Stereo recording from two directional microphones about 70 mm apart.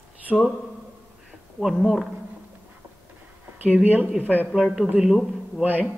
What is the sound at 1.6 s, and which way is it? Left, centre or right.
Speech, centre.